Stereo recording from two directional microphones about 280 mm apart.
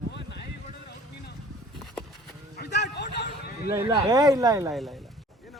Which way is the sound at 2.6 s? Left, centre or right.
Left.